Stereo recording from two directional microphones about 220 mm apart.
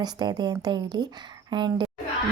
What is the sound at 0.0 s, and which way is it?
A woman's voice, 20° right (ahead or behind).